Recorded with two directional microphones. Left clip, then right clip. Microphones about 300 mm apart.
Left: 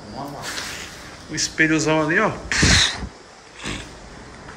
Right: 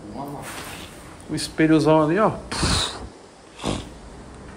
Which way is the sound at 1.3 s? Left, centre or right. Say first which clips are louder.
Even; centre.